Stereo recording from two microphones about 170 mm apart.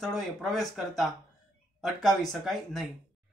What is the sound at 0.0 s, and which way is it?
A man's voice, centre (ahead or behind).